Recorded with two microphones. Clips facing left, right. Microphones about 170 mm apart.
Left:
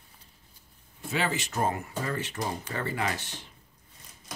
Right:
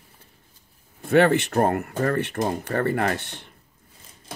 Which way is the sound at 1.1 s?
60° right (ahead or behind).